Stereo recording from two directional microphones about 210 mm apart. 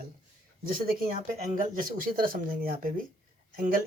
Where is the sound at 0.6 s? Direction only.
40° right (ahead or behind).